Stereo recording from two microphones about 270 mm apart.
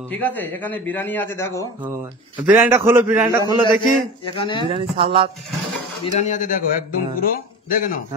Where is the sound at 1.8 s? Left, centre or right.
Centre.